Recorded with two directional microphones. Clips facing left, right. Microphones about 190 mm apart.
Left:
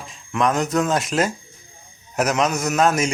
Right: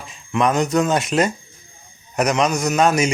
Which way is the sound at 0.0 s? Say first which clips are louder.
Right 2 dB; centre (ahead or behind).